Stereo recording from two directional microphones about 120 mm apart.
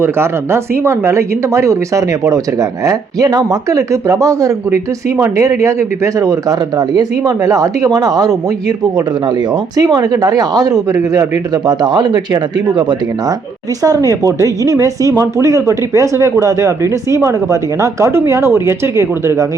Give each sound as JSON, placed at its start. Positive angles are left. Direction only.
{"t": 0.0, "sound": "speech", "side_deg": -20}